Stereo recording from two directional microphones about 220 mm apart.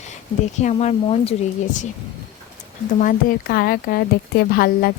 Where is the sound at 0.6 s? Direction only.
30° left (ahead or behind).